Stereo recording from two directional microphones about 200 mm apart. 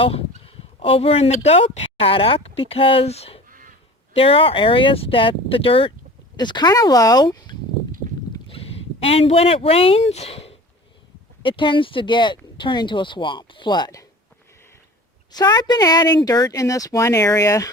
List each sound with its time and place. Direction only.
0.0 s speech: 30° left (ahead or behind)
3.5 s honk: 40° right (ahead or behind)
4.1 s speech: 30° left (ahead or behind)
15.3 s speech: 20° left (ahead or behind)